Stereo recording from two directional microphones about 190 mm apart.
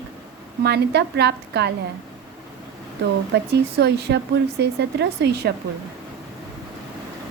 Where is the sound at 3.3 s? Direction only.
60° right (ahead or behind).